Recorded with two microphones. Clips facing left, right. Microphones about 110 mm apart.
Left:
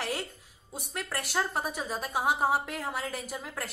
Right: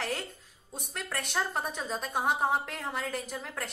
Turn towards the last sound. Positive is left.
turn(degrees=5)  # may be behind; listen again after turning